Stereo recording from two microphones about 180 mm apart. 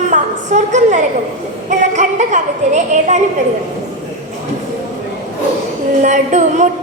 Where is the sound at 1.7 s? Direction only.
40° right (ahead or behind).